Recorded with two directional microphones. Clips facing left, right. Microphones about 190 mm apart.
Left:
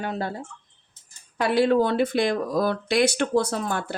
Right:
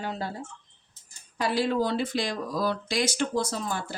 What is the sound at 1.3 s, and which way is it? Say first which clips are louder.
Speech: left 6 dB; 60° left (ahead or behind).